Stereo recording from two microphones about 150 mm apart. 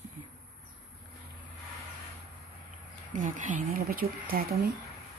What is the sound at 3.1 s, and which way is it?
Speech, 60° right (ahead or behind).